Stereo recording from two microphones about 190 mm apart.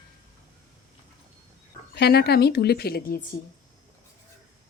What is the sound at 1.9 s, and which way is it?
Speech, 60° left (ahead or behind).